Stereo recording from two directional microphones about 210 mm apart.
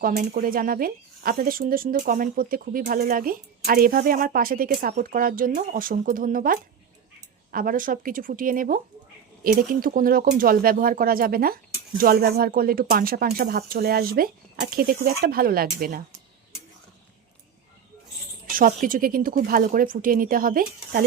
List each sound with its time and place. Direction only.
0.0 s speech: 40° right (ahead or behind)
18.5 s speech: 40° right (ahead or behind)